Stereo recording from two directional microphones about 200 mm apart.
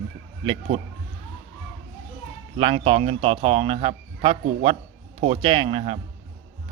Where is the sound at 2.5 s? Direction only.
30° right (ahead or behind).